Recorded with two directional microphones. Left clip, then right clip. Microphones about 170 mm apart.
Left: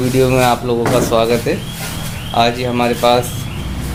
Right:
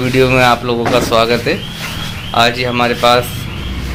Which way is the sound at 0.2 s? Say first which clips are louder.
Right 3 dB; 5° left (ahead or behind).